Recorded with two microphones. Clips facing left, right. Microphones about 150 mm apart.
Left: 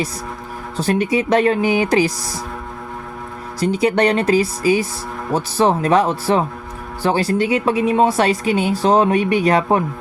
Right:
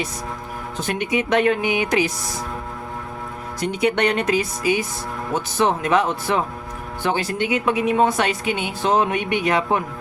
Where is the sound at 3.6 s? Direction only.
35° left (ahead or behind).